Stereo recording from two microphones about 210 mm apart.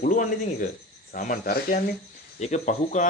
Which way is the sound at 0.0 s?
35° left (ahead or behind).